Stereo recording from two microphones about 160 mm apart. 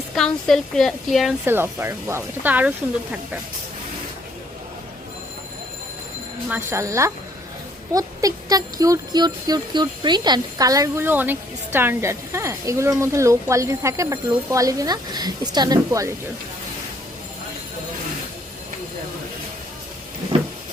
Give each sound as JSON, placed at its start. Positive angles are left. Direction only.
{"t": 0.2, "sound": "speech", "side_deg": 5}
{"t": 1.5, "sound": "speech", "side_deg": -15}
{"t": 6.7, "sound": "speech", "side_deg": -20}